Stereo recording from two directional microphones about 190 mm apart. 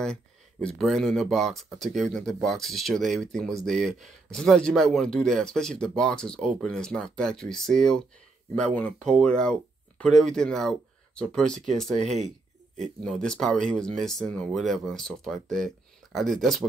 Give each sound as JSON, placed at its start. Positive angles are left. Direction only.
{"t": 0.0, "sound": "speech", "side_deg": 5}
{"t": 12.0, "sound": "speech", "side_deg": -35}
{"t": 13.0, "sound": "speech", "side_deg": 5}